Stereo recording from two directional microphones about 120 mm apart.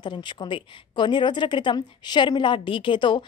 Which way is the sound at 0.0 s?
40° left (ahead or behind).